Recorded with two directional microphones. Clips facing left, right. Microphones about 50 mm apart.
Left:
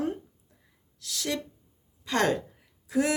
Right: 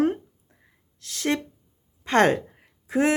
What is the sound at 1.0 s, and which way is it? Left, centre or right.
Speech, right.